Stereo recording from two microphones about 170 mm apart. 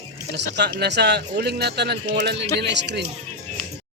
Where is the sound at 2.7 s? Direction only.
90° right.